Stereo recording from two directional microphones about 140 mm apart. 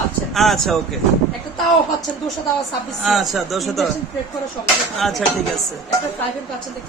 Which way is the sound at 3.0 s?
Centre (ahead or behind).